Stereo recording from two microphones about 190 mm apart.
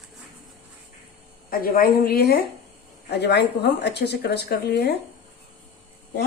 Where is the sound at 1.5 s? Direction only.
50° left (ahead or behind).